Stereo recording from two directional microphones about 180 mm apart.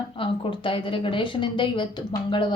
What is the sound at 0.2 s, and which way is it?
Speech, 30° left (ahead or behind).